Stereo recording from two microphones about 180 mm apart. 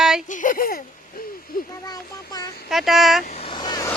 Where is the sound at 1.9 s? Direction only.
20° left (ahead or behind).